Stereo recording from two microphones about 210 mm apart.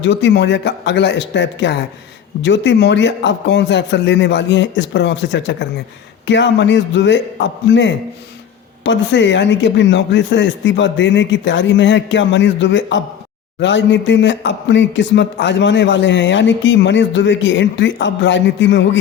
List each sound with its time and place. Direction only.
0.0 s a man's voice: 60° left (ahead or behind)